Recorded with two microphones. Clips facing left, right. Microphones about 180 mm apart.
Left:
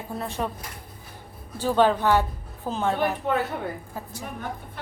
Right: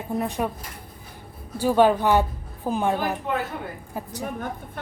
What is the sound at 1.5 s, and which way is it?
A woman's voice, 10° right (ahead or behind).